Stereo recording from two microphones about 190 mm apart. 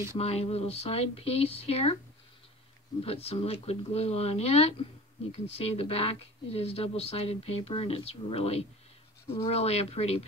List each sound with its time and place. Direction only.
0.2 s speech: 30° left (ahead or behind)
3.0 s speech: 30° left (ahead or behind)